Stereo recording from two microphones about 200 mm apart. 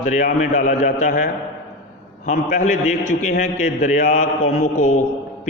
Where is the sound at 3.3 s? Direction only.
45° left (ahead or behind).